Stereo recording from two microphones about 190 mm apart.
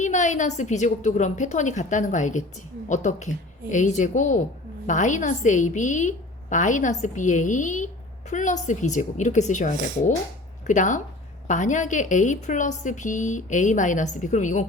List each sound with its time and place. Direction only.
0.0 s a woman's voice: 40° left (ahead or behind)